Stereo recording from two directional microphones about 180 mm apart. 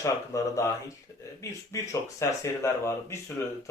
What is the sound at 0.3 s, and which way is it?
Speech, 20° left (ahead or behind).